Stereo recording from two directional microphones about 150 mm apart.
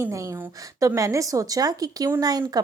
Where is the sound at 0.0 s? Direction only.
20° right (ahead or behind).